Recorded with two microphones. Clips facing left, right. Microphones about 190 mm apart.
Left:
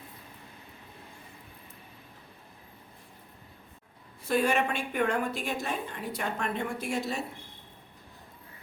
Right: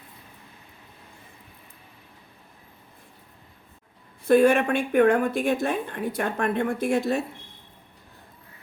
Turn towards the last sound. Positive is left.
turn(degrees=-55)  # may be behind; listen again after turning